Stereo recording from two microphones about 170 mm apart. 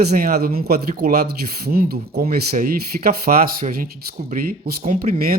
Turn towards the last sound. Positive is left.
turn(degrees=-60)  # may be behind; listen again after turning